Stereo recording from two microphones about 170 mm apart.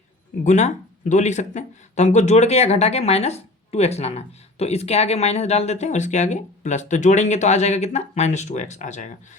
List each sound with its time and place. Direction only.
0.4 s speech: 45° left (ahead or behind)